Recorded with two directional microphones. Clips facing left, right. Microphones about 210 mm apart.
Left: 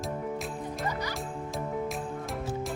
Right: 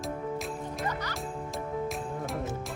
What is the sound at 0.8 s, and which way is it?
Music, 10° left (ahead or behind).